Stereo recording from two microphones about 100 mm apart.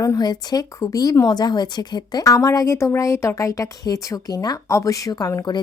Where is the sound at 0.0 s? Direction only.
40° left (ahead or behind).